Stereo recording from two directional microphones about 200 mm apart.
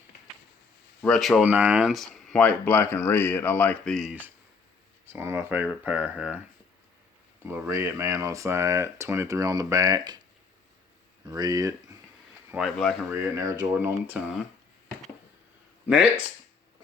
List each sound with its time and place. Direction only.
1.0 s speech: centre (ahead or behind)
5.0 s speech: 10° right (ahead or behind)
7.4 s speech: 10° right (ahead or behind)
11.3 s speech: 20° right (ahead or behind)
12.5 s speech: centre (ahead or behind)
13.1 s speech: 15° right (ahead or behind)